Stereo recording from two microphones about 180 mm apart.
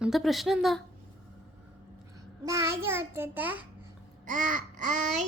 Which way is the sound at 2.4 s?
15° right (ahead or behind).